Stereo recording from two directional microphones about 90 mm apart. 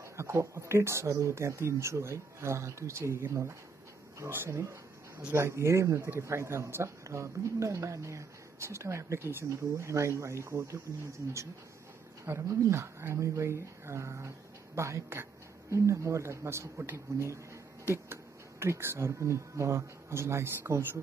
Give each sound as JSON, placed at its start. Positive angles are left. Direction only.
{"t": 0.2, "sound": "speech", "side_deg": -30}
{"t": 12.3, "sound": "speech", "side_deg": -30}